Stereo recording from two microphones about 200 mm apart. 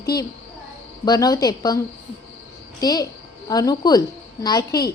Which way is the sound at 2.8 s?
20° left (ahead or behind).